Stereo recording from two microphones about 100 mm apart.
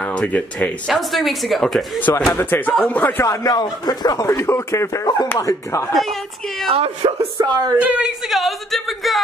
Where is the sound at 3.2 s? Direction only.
40° left (ahead or behind).